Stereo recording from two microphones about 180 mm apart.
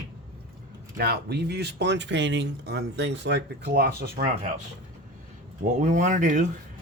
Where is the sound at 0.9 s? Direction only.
60° right (ahead or behind).